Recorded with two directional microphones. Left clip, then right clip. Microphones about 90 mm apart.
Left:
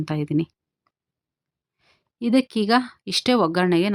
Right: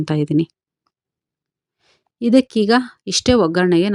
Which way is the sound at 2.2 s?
40° right (ahead or behind).